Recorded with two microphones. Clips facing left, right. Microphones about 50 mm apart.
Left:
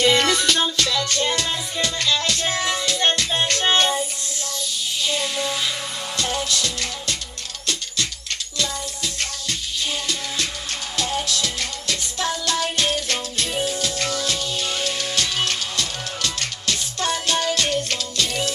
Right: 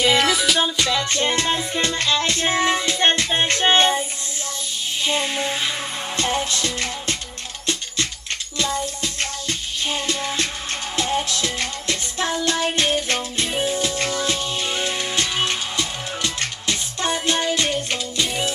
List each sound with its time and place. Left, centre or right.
0.0 s music: centre
0.7 s music: centre
5.0 s music: right
8.5 s music: right